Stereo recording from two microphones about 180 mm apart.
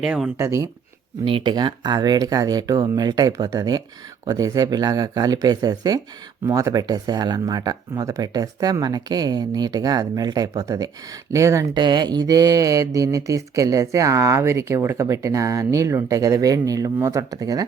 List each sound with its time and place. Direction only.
0.0 s speech: centre (ahead or behind)
0.3 s speech: 15° right (ahead or behind)
1.2 s speech: 30° right (ahead or behind)